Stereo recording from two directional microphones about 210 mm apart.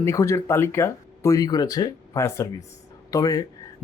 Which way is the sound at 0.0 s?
15° left (ahead or behind).